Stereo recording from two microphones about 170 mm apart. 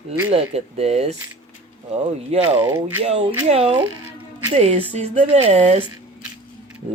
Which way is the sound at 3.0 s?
35° right (ahead or behind).